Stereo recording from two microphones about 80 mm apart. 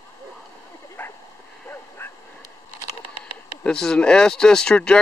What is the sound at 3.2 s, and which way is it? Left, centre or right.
Speech, centre.